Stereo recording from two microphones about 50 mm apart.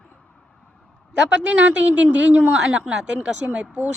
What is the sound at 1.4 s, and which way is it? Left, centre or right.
A woman's voice, right.